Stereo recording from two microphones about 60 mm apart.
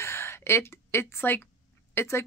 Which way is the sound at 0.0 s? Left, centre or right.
Left.